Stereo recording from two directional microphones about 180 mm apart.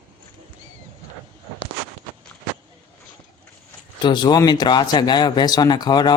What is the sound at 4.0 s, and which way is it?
Speech, 25° left (ahead or behind).